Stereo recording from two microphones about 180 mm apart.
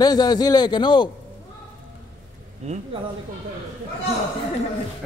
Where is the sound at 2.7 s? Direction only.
40° right (ahead or behind).